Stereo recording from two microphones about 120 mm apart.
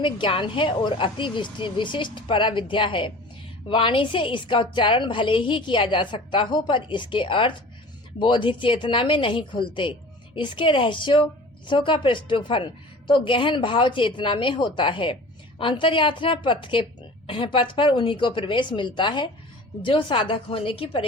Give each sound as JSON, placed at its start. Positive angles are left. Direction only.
{"t": 0.0, "sound": "a woman's voice", "side_deg": 45}